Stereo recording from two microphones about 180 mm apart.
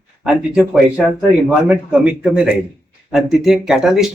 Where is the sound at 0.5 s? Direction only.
5° right (ahead or behind).